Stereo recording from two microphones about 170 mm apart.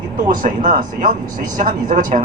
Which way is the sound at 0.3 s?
50° right (ahead or behind).